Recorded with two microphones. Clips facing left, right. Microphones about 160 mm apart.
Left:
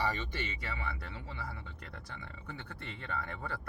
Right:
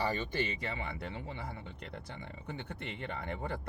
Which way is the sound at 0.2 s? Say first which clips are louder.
Right 5 dB; 30° right (ahead or behind).